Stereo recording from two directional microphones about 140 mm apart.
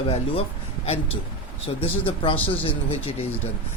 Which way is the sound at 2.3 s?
10° left (ahead or behind).